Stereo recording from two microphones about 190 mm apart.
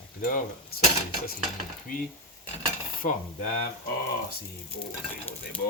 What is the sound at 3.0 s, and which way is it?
Speech, 45° left (ahead or behind).